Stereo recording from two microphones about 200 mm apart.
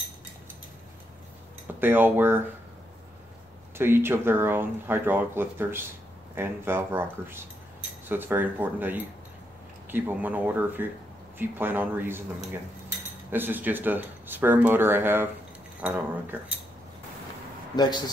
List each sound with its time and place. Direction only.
1.8 s speech: 10° right (ahead or behind)
3.7 s speech: 10° right (ahead or behind)
17.7 s a man's voice: 20° left (ahead or behind)